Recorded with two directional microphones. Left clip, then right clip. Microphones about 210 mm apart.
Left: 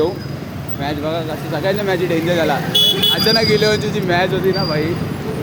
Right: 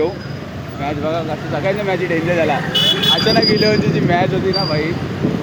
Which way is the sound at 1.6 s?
15° left (ahead or behind).